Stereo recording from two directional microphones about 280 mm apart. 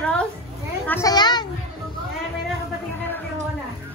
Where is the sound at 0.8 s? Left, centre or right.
Centre.